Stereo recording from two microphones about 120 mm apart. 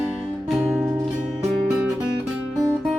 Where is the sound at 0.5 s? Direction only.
15° right (ahead or behind).